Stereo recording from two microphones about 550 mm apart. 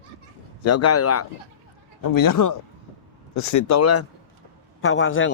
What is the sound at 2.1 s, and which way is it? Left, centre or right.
A man's voice, left.